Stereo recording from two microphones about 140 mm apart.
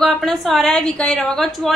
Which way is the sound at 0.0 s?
Centre (ahead or behind).